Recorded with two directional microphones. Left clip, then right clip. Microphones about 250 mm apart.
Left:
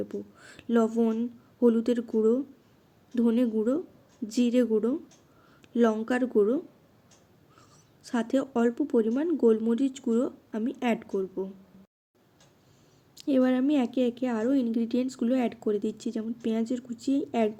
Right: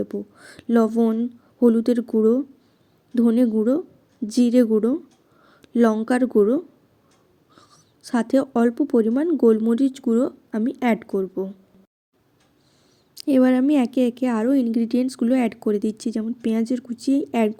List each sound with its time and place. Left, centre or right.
0.0 s a woman's voice: right
13.1 s a woman's voice: right